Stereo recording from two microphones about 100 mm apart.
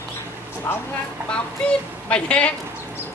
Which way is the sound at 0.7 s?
20° left (ahead or behind).